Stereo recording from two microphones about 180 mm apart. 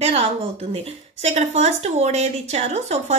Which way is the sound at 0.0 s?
35° right (ahead or behind).